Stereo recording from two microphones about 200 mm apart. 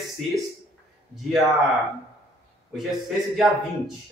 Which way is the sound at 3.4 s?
Centre (ahead or behind).